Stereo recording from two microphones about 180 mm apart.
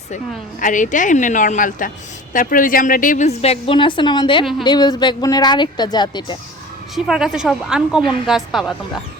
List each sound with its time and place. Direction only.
0.6 s a woman's voice: 45° left (ahead or behind); by 6.3 s 25° left (ahead or behind)
6.9 s a woman's voice: 5° right (ahead or behind)